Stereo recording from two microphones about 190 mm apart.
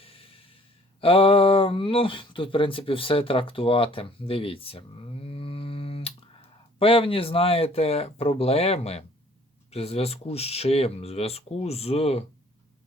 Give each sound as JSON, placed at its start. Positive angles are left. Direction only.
{"t": 0.0, "sound": "snort", "side_deg": 30}
{"t": 1.0, "sound": "speech", "side_deg": 30}